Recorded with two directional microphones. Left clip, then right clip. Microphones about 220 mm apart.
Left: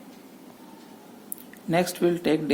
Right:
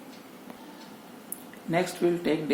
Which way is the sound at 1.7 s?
35° left (ahead or behind).